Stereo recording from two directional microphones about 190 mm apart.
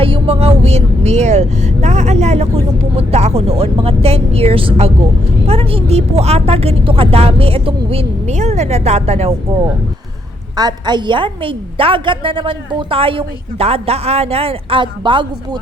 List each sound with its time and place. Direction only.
0.0 s speech: 30° right (ahead or behind)
10.6 s a woman's voice: 20° right (ahead or behind)